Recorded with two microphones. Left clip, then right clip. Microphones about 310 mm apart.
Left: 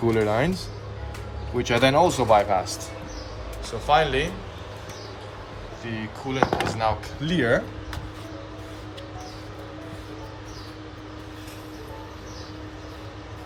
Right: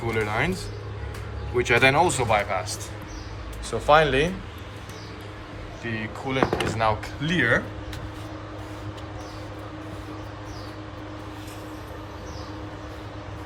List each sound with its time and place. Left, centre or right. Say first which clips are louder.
0.1 s speech: left 1 dB; centre
1.5 s speech: right 1 dB; centre
3.7 s speech: right 2 dB; centre
5.8 s speech: right 2 dB; centre